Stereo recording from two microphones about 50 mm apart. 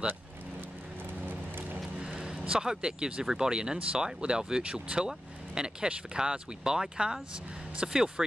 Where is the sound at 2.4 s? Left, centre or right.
Centre.